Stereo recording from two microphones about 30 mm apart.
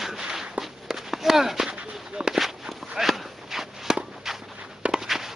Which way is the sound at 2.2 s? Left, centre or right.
Right.